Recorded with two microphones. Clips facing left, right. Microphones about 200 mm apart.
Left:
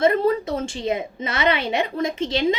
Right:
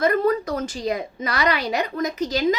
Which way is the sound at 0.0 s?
25° left (ahead or behind).